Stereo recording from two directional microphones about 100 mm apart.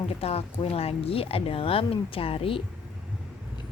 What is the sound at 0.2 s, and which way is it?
Speech, 85° left.